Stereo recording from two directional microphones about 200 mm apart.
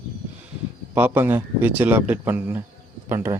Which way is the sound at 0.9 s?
10° right (ahead or behind).